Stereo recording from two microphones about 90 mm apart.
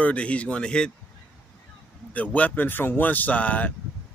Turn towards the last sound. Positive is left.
turn(degrees=15)  # may be behind; listen again after turning